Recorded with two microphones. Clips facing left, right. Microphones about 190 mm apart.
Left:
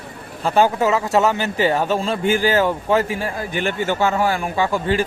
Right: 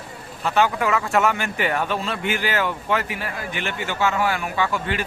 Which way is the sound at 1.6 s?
35° left (ahead or behind).